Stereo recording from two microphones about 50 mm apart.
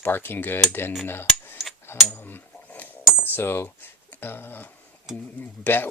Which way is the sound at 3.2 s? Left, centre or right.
Left.